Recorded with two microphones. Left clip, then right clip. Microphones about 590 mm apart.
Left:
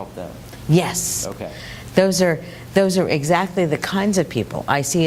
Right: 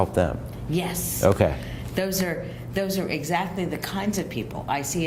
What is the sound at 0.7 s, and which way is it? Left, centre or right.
Speech, left.